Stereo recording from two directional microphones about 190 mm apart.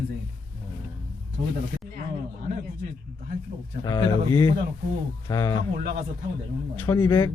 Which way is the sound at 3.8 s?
20° left (ahead or behind).